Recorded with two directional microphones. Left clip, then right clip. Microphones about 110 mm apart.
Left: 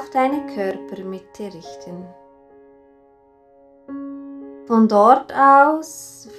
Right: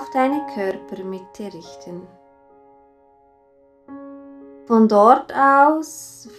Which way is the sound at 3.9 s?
25° left (ahead or behind).